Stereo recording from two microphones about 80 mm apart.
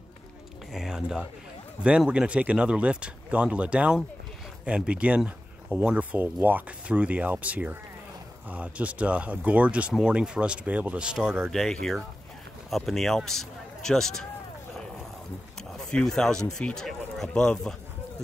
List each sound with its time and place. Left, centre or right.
0.7 s a sound: centre
1.8 s speech: centre
11.5 s speech: centre
15.9 s speech: centre